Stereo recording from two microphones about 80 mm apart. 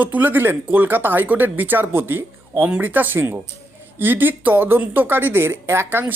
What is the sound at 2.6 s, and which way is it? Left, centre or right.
Speech, centre.